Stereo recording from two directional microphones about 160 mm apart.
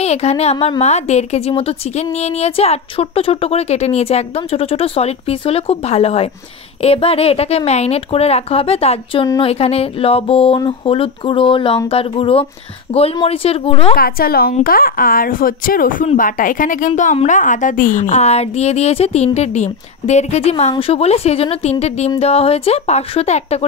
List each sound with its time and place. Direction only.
0.0 s a woman's voice: 40° left (ahead or behind)
13.9 s a woman's voice: 70° left (ahead or behind); by 23.6 s 40° left (ahead or behind)